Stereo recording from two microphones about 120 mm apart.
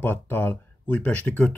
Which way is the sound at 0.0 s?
15° left (ahead or behind).